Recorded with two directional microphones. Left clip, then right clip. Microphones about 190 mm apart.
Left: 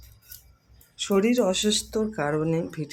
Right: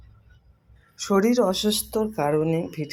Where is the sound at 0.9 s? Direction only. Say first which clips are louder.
Right 2 dB; 5° right (ahead or behind).